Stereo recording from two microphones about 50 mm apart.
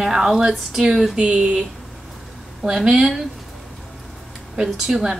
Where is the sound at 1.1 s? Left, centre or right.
Right.